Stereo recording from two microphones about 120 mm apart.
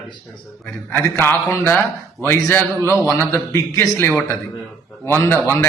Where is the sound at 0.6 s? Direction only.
15° left (ahead or behind).